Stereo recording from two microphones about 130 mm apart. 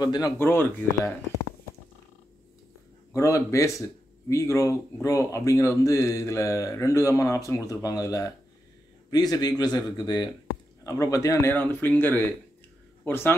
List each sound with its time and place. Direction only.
0.0 s speech: 30° left (ahead or behind)
0.4 s speech: 15° left (ahead or behind)
3.2 s a man's voice: 20° left (ahead or behind)